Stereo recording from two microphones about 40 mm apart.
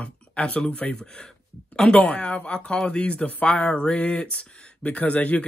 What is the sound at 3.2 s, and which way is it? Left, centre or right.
Speech, left.